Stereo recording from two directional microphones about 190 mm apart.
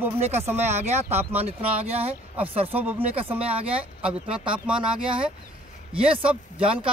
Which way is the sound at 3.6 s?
30° right (ahead or behind).